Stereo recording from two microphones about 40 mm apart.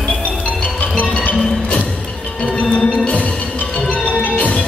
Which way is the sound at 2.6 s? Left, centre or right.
Left.